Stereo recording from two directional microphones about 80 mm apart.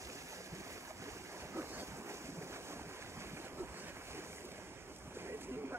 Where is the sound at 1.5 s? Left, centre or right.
Right.